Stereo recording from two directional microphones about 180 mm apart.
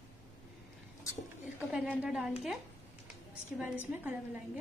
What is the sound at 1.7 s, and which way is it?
Speech, 5° right (ahead or behind).